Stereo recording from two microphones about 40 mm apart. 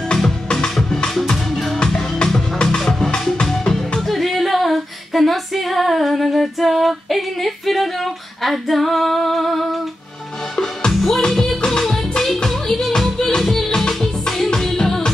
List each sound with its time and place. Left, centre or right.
0.1 s music: centre
1.8 s music: centre
2.8 s music: centre
4.1 s female singing: centre
10.9 s music: centre
12.4 s music: centre